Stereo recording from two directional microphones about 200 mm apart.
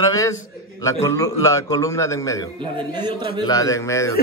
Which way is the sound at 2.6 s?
25° right (ahead or behind).